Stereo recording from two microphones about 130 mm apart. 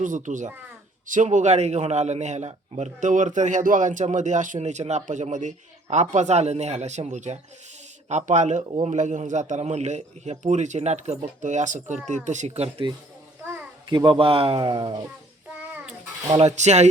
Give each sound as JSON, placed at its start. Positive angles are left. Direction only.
{"t": 0.0, "sound": "a man's voice", "side_deg": -75}
{"t": 12.6, "sound": "speech", "side_deg": -45}
{"t": 13.9, "sound": "speech", "side_deg": -35}
{"t": 16.6, "sound": "a man's voice", "side_deg": -60}